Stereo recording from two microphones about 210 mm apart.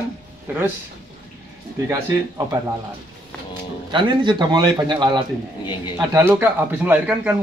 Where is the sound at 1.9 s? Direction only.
15° right (ahead or behind).